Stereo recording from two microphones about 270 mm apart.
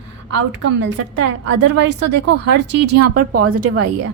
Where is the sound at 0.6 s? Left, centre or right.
Right.